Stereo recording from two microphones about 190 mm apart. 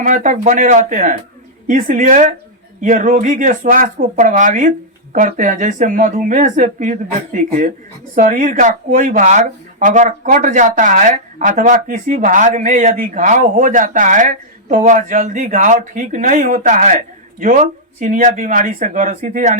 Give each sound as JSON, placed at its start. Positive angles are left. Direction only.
{"t": 0.0, "sound": "speech", "side_deg": -40}